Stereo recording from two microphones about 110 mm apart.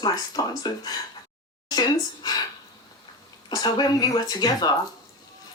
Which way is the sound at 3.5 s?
40° left (ahead or behind).